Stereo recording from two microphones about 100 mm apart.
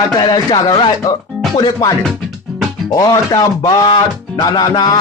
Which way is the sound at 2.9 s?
40° left (ahead or behind).